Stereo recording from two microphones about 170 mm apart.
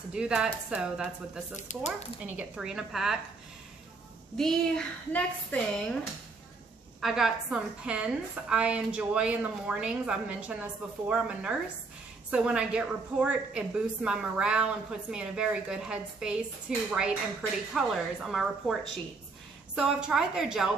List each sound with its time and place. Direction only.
0.1 s a woman's voice: 5° right (ahead or behind)
1.6 s speech: 45° left (ahead or behind)
2.2 s a woman's voice: 5° right (ahead or behind)
4.4 s a woman's voice: 5° left (ahead or behind)
7.0 s a woman's voice: centre (ahead or behind)